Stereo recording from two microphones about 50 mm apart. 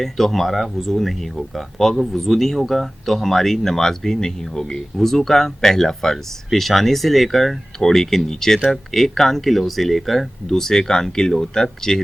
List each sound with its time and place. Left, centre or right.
0.0 s speech: centre